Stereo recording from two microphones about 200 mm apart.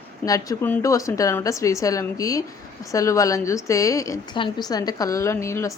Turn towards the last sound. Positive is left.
turn(degrees=15)  # may be behind; listen again after turning